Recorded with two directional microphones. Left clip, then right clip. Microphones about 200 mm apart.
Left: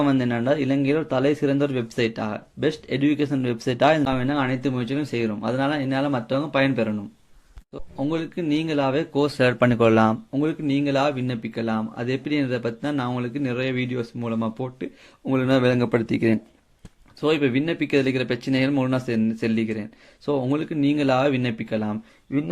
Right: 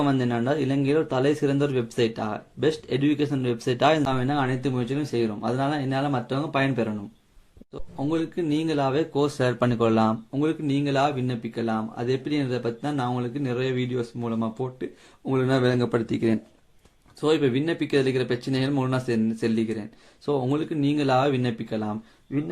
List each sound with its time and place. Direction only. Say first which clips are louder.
0.0 s speech: left 2 dB; 25° left (ahead or behind)
7.9 s speech: even; 30° left (ahead or behind)